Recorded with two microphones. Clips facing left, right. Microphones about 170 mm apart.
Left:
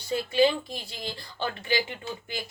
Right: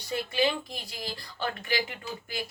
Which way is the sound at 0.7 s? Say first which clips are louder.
Left 2 dB; 25° left (ahead or behind).